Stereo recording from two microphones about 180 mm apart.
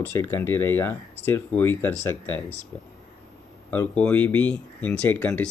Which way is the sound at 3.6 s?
10° left (ahead or behind).